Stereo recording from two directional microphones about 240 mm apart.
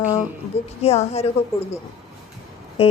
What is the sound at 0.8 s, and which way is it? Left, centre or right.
Speech, left.